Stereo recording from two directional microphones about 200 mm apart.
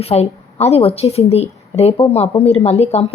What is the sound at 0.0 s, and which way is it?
A woman's voice, 30° left (ahead or behind).